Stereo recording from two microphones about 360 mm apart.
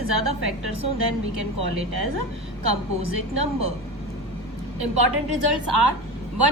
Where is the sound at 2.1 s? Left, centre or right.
Right.